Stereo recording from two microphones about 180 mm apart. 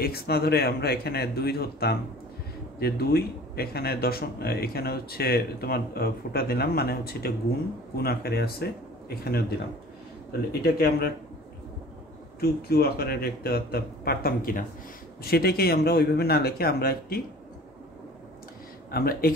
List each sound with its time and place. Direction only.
0.0 s speech: 60° left (ahead or behind)
10.6 s speech: 60° left (ahead or behind)
12.4 s speech: 60° left (ahead or behind)
18.9 s speech: 55° left (ahead or behind)